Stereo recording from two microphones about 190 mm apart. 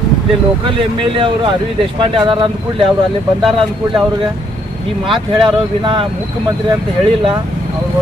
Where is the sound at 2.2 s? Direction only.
25° right (ahead or behind).